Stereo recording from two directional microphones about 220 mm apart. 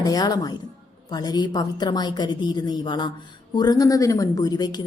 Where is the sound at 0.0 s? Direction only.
15° left (ahead or behind).